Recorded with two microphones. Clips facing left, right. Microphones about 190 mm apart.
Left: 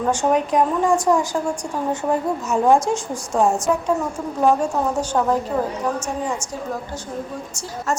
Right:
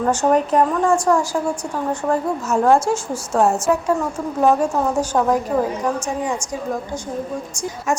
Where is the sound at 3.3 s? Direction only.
Centre (ahead or behind).